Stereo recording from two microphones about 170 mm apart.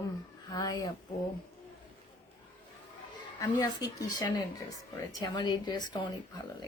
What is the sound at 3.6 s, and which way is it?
Speech, 20° left (ahead or behind).